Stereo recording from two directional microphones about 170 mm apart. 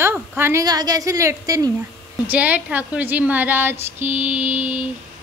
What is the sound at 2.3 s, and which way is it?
A woman's voice, 10° right (ahead or behind).